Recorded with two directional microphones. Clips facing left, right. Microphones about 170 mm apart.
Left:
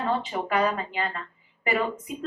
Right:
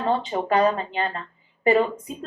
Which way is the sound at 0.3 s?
30° right (ahead or behind).